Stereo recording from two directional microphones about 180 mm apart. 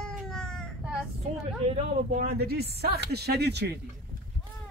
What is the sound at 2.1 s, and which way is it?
Speech, 60° right (ahead or behind).